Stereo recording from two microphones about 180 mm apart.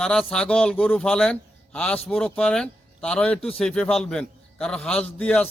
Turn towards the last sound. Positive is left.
turn(degrees=5)  # may be behind; listen again after turning